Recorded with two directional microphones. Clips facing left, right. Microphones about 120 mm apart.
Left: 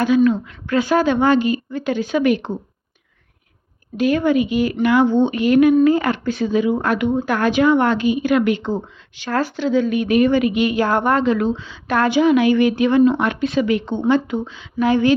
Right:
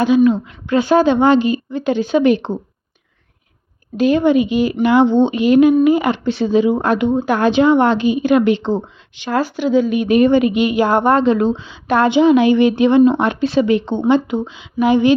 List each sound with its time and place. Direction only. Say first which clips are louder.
0.0 s a woman's voice: right 3 dB; 20° right (ahead or behind)
3.9 s a woman's voice: right 3 dB; 25° right (ahead or behind)